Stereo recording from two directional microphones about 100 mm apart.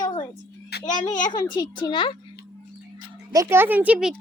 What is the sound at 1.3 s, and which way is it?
Speech, 45° left (ahead or behind).